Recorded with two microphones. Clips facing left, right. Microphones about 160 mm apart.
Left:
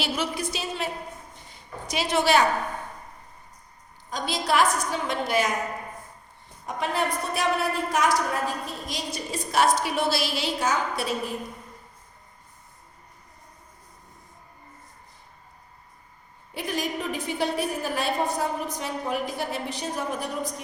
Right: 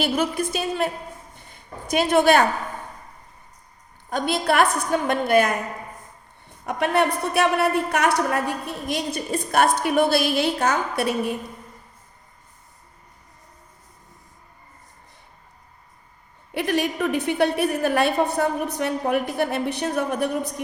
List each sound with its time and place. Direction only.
0.0 s a woman's voice: 50° right (ahead or behind)
4.1 s a woman's voice: 60° right (ahead or behind)
6.7 s a woman's voice: 65° right (ahead or behind)
16.6 s a woman's voice: 65° right (ahead or behind)